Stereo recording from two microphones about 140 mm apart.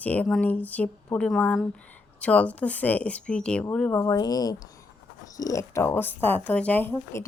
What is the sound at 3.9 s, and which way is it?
A woman's voice, 20° left (ahead or behind).